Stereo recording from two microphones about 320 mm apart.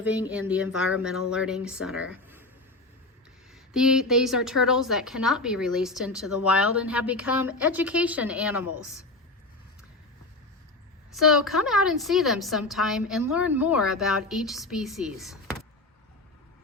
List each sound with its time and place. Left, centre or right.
0.0 s a woman's voice: centre
3.5 s a woman's voice: centre
8.6 s a woman's voice: left
11.1 s a woman's voice: centre